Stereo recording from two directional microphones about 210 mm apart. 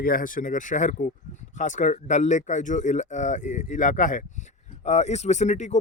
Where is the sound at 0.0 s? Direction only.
40° left (ahead or behind).